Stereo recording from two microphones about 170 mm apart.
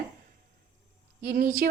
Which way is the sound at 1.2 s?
55° right (ahead or behind).